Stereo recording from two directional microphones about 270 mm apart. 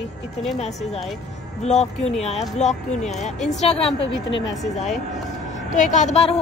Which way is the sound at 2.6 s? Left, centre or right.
Left.